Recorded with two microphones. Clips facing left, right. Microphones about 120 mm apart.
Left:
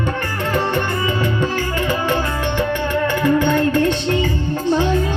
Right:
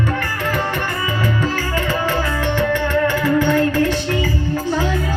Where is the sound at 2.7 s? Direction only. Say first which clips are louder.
Right 2 dB; 20° left (ahead or behind).